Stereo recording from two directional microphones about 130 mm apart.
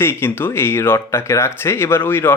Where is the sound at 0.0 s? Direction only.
20° left (ahead or behind).